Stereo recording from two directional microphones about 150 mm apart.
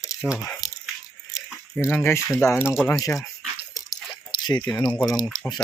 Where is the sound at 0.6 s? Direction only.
25° left (ahead or behind).